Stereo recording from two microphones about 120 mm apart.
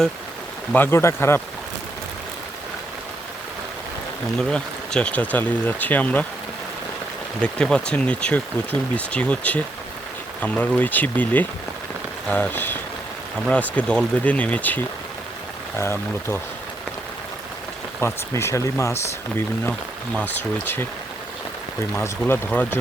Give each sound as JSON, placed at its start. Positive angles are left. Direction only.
{"t": 0.7, "sound": "speech", "side_deg": 20}
{"t": 4.4, "sound": "speech", "side_deg": 10}
{"t": 7.4, "sound": "speech", "side_deg": 10}
{"t": 15.8, "sound": "speech", "side_deg": 20}
{"t": 18.0, "sound": "speech", "side_deg": 20}
{"t": 20.1, "sound": "speech", "side_deg": 15}